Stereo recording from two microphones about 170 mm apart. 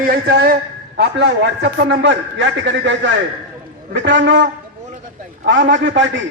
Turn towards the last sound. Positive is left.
turn(degrees=-90)